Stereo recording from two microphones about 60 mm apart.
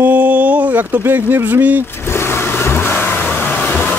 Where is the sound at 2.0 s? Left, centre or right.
Left.